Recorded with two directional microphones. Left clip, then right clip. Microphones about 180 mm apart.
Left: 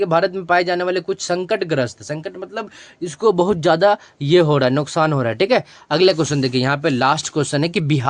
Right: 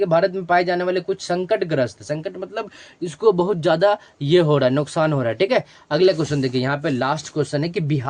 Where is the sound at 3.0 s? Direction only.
30° left (ahead or behind).